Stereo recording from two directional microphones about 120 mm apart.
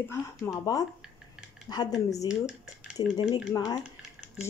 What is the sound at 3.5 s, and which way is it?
Speech, 30° left (ahead or behind).